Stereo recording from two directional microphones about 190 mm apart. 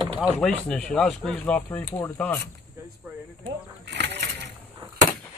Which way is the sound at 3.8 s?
60° right (ahead or behind).